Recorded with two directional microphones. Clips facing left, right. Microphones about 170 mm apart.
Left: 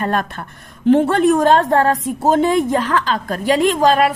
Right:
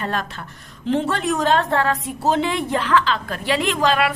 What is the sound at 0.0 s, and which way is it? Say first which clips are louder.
A woman's voice: left 6 dB; 50° left (ahead or behind).